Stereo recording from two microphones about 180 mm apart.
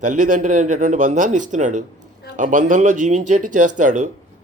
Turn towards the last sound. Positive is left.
turn(degrees=-45)  # may be behind; listen again after turning